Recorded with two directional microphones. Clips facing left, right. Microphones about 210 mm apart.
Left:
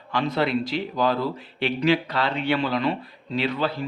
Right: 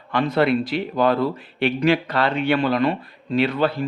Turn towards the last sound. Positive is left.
turn(degrees=-50)  # may be behind; listen again after turning